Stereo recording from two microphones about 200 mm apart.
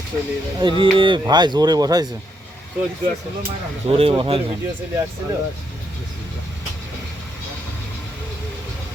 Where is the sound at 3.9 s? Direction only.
30° right (ahead or behind).